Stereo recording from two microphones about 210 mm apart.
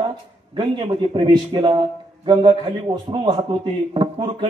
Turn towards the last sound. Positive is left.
turn(degrees=-20)  # may be behind; listen again after turning